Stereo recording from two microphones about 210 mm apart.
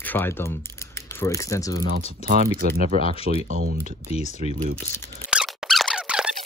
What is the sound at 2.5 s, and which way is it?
Speech, 45° right (ahead or behind).